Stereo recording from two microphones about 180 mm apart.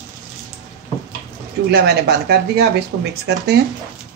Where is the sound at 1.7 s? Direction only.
65° right (ahead or behind).